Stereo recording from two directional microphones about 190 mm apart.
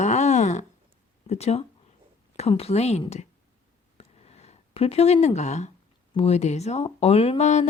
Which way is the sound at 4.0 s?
35° left (ahead or behind).